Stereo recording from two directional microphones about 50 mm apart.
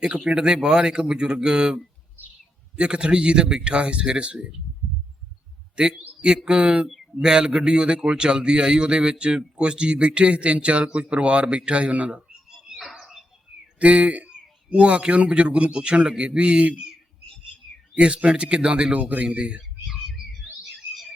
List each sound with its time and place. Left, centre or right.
0.0 s a man's voice: centre
5.7 s a man's voice: centre
12.5 s a sound: centre
13.7 s a man's voice: right
17.9 s a man's voice: right
18.9 s a man's voice: right